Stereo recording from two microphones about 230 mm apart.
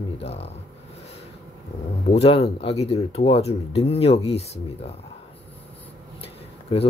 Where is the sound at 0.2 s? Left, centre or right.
Left.